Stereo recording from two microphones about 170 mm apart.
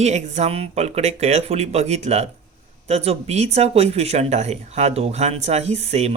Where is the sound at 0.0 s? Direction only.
40° right (ahead or behind).